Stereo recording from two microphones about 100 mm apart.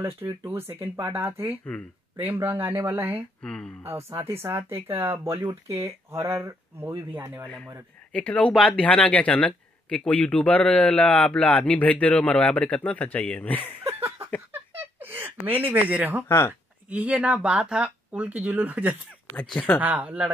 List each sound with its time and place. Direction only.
0.0 s speech: 25° right (ahead or behind)
3.4 s speech: 10° left (ahead or behind)
4.2 s speech: 25° right (ahead or behind)
8.1 s speech: 15° left (ahead or behind)
13.7 s a sound: 25° right (ahead or behind)
14.8 s speech: 20° right (ahead or behind)
16.3 s speech: 25° left (ahead or behind)
16.9 s speech: 15° right (ahead or behind)
19.4 s speech: 10° left (ahead or behind)
19.8 s speech: 15° right (ahead or behind)